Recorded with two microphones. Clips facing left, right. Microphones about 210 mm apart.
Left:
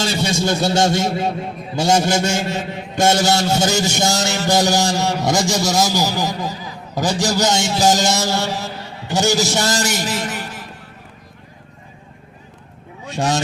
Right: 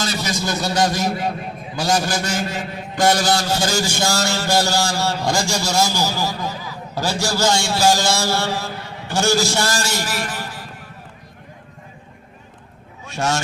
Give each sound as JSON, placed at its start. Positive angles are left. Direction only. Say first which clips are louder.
{"t": 0.0, "sound": "a man's voice", "louder": "left 4 dB", "side_deg": 25}
{"t": 13.1, "sound": "speech", "louder": "left 2 dB", "side_deg": 15}